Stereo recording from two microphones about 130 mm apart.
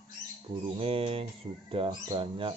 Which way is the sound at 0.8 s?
45° right (ahead or behind).